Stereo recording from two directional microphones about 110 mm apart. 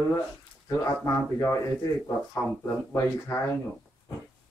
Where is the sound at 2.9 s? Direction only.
25° left (ahead or behind).